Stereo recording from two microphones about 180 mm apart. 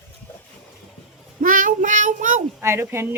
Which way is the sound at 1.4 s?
50° right (ahead or behind).